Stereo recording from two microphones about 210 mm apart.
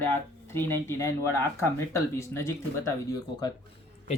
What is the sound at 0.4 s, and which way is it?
Speech, 10° left (ahead or behind).